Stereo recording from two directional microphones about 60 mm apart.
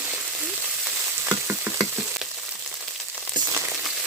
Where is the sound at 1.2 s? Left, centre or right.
Right.